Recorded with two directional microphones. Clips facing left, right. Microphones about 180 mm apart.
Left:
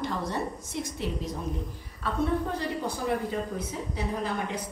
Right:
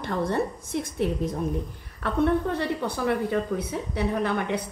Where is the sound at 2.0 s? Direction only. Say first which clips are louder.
Right 5 dB; 65° right (ahead or behind).